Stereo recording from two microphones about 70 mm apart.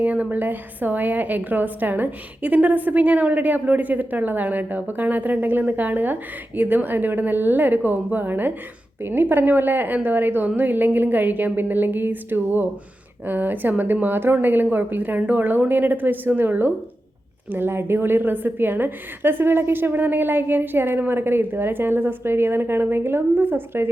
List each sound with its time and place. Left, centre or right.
0.0 s a woman's voice: right